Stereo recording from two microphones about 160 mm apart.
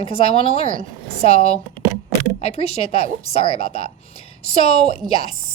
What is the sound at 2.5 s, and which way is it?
A woman's voice, 40° left (ahead or behind).